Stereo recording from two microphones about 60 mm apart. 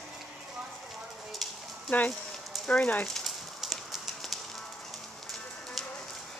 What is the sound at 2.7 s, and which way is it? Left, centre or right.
Speech, centre.